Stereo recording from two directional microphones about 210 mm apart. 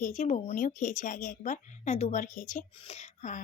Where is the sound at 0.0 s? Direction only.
35° left (ahead or behind).